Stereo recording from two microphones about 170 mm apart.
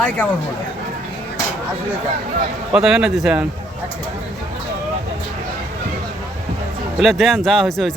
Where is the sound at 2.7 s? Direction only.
Centre (ahead or behind).